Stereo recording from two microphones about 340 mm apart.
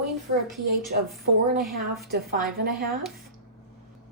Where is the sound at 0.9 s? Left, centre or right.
Right.